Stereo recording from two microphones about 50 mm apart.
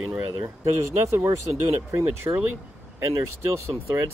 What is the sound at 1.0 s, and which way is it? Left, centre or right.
Speech, right.